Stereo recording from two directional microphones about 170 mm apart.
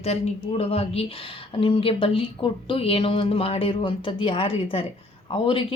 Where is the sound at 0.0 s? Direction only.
35° left (ahead or behind).